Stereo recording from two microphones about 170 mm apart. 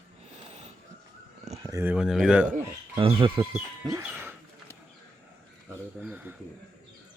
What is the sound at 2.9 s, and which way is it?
Speech, 30° right (ahead or behind).